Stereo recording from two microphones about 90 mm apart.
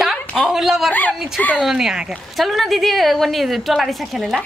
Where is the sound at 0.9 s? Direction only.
20° left (ahead or behind).